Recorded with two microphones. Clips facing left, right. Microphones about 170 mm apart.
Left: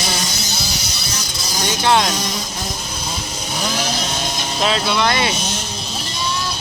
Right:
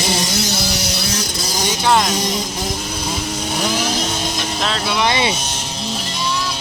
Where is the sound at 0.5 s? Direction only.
85° right.